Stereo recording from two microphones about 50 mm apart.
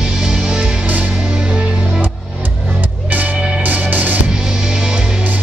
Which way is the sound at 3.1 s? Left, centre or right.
Right.